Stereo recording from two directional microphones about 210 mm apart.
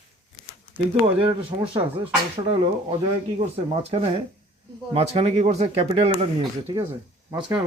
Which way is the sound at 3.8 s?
30° right (ahead or behind).